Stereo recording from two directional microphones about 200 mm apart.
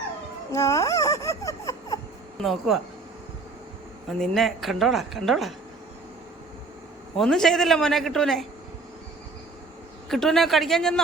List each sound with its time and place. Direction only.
0.5 s a sound: 15° left (ahead or behind)
2.4 s a woman's voice: centre (ahead or behind)
4.2 s a woman's voice: centre (ahead or behind)
7.2 s a woman's voice: centre (ahead or behind)
10.1 s a woman's voice: centre (ahead or behind)